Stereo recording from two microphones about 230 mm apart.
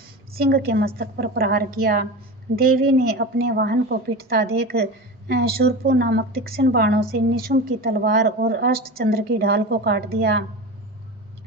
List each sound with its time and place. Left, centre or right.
0.3 s a woman's voice: right